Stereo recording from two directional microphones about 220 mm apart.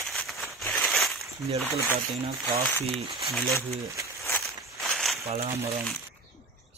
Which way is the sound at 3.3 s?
Centre (ahead or behind).